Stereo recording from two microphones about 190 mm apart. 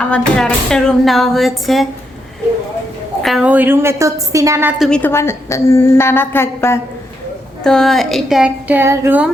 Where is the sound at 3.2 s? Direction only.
5° right (ahead or behind).